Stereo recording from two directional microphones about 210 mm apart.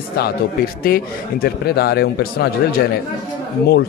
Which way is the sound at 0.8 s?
45° left (ahead or behind).